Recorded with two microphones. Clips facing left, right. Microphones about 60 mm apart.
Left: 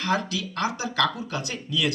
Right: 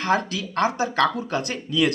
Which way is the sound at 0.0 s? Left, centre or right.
Right.